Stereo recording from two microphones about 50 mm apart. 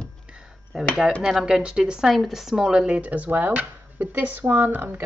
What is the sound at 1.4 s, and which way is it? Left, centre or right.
A woman's voice, centre.